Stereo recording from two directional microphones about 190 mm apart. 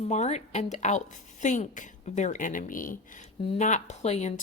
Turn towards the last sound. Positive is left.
turn(degrees=35)  # may be behind; listen again after turning